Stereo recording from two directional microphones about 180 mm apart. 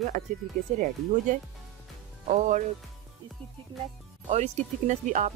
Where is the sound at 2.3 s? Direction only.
40° right (ahead or behind).